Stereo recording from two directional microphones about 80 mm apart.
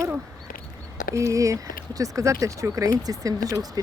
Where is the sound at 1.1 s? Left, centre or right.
Right.